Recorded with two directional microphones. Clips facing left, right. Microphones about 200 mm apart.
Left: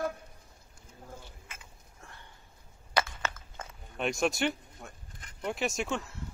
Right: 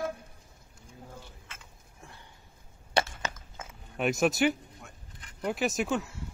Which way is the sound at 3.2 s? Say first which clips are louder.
Even; 15° right (ahead or behind).